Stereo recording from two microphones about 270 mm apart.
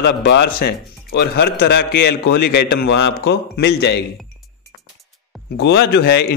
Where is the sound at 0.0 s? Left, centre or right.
Left.